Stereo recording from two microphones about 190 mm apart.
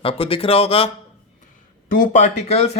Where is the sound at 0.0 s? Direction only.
30° left (ahead or behind).